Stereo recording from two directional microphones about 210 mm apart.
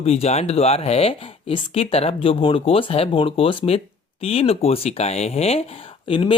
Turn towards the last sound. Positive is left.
turn(degrees=25)  # may be behind; listen again after turning